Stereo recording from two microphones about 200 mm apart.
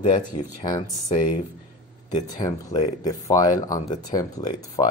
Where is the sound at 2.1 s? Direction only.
20° left (ahead or behind).